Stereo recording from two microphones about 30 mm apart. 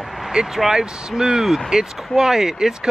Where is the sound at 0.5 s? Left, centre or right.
Centre.